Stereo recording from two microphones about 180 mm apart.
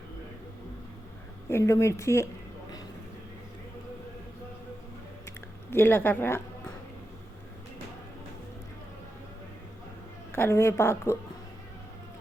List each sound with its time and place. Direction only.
1.5 s a woman's voice: 15° left (ahead or behind)
5.7 s a woman's voice: 10° left (ahead or behind)
10.3 s a woman's voice: 15° left (ahead or behind)